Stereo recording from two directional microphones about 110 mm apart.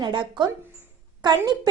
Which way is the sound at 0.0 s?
45° right (ahead or behind).